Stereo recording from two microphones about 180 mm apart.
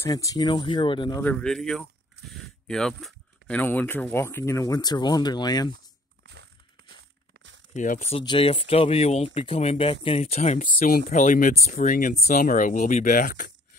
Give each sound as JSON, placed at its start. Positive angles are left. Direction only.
{"t": 0.0, "sound": "speech", "side_deg": 20}
{"t": 1.2, "sound": "speech", "side_deg": 5}
{"t": 6.8, "sound": "crushing", "side_deg": -60}
{"t": 7.3, "sound": "a sound", "side_deg": -90}
{"t": 7.7, "sound": "speech", "side_deg": 45}
{"t": 8.2, "sound": "speech", "side_deg": 30}